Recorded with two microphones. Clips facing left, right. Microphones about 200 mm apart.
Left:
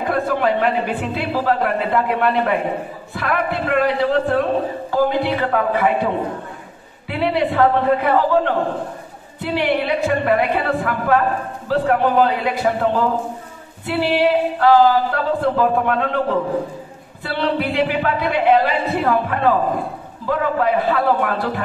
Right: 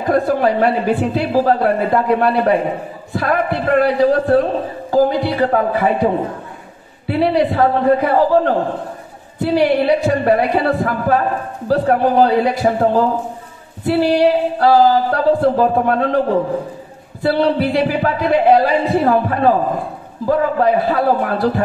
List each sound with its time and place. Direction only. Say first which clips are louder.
0.0 s a woman's voice: right 4 dB; 40° right (ahead or behind)
7.1 s a woman's voice: right 4 dB; 40° right (ahead or behind)
17.2 s a woman's voice: right 6 dB; 40° right (ahead or behind)